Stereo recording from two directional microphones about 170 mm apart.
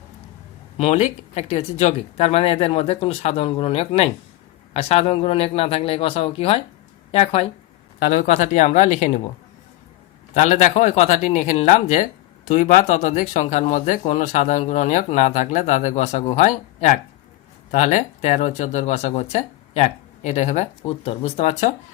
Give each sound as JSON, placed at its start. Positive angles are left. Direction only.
{"t": 0.8, "sound": "speech", "side_deg": 40}
{"t": 8.0, "sound": "speech", "side_deg": 55}
{"t": 8.3, "sound": "speech", "side_deg": 45}
{"t": 10.3, "sound": "speech", "side_deg": 45}